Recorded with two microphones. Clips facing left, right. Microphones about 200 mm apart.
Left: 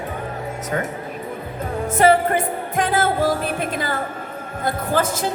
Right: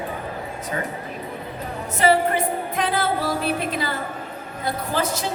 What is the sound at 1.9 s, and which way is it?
Music, 50° left (ahead or behind).